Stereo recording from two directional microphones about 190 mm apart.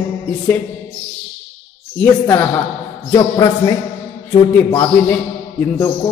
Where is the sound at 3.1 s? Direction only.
15° left (ahead or behind).